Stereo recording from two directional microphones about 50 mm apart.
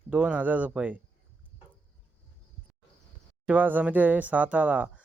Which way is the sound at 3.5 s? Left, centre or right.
Right.